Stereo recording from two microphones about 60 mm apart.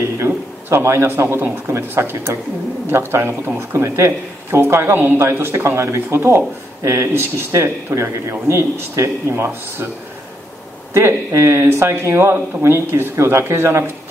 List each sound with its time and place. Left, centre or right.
0.2 s a sound: right
1.4 s speech: right
10.9 s speech: right